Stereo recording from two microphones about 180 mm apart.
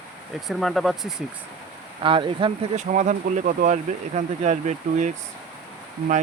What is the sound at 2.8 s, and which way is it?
Speech, 40° right (ahead or behind).